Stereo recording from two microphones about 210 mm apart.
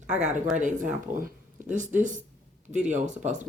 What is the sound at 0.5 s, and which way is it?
Speech, 35° right (ahead or behind).